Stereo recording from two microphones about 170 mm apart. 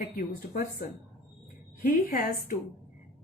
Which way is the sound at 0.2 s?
50° left (ahead or behind).